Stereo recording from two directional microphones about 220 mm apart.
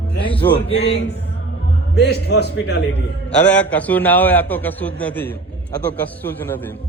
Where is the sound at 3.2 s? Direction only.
5° left (ahead or behind).